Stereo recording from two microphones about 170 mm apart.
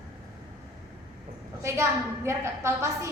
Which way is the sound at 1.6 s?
15° right (ahead or behind).